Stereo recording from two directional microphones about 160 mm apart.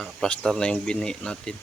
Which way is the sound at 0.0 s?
5° left (ahead or behind).